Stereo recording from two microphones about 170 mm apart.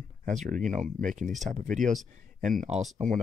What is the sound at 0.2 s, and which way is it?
Speech, 45° right (ahead or behind).